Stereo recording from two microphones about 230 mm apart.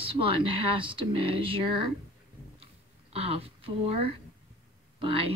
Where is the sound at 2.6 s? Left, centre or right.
Right.